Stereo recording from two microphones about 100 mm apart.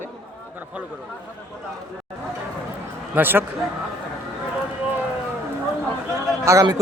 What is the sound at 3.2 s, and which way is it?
Speech, 20° right (ahead or behind).